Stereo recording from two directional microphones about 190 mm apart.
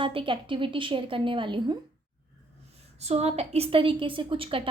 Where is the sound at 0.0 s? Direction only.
25° right (ahead or behind).